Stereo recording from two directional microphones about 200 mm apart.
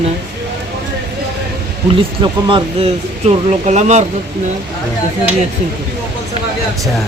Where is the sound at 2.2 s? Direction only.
25° right (ahead or behind).